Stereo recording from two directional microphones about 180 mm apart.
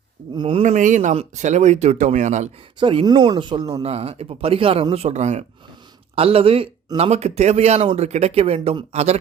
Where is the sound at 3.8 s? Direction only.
35° right (ahead or behind).